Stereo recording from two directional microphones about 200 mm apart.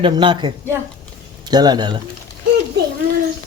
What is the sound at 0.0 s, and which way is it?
A woman's voice, 25° right (ahead or behind).